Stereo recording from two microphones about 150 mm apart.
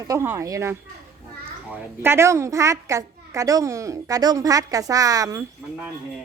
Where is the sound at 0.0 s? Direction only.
20° right (ahead or behind).